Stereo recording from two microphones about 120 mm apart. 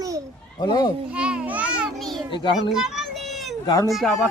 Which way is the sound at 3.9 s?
Centre (ahead or behind).